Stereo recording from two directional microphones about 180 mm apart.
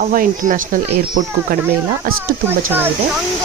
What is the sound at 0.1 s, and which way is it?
Speech, 50° right (ahead or behind).